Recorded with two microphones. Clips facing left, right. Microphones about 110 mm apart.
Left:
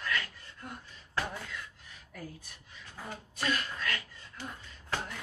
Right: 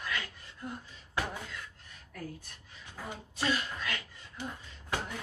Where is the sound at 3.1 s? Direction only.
15° right (ahead or behind).